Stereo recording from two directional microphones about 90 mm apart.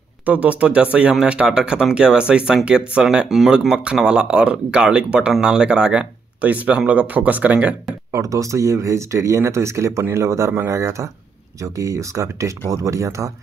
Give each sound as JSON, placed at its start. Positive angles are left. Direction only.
{"t": 0.2, "sound": "speech", "side_deg": -15}
{"t": 8.1, "sound": "speech", "side_deg": -35}